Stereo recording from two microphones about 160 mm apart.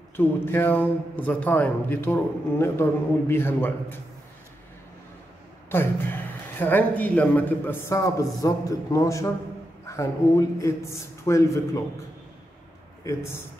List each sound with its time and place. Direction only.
0.1 s a man's voice: 15° left (ahead or behind)
5.7 s a man's voice: 15° left (ahead or behind)
13.0 s a man's voice: 15° left (ahead or behind)